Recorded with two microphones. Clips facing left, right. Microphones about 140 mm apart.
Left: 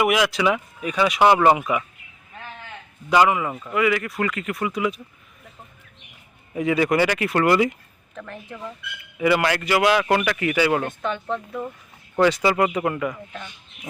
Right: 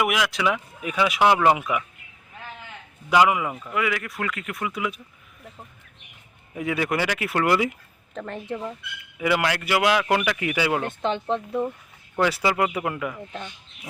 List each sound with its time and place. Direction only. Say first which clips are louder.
0.0 s a man's voice: left 4 dB; centre (ahead or behind)
3.1 s speech: left 1 dB; 10° right (ahead or behind)
3.5 s a man's voice: left 5 dB; 5° left (ahead or behind)
6.6 s a man's voice: left 5 dB; centre (ahead or behind)
8.1 s speech: right 5 dB; 30° right (ahead or behind)
9.1 s a man's voice: left 3 dB; centre (ahead or behind)
11.0 s speech: right 2 dB; 25° right (ahead or behind)
12.2 s a man's voice: left 4 dB; 5° right (ahead or behind)